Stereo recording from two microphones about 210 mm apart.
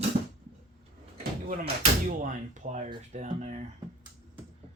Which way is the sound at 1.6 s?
35° right (ahead or behind).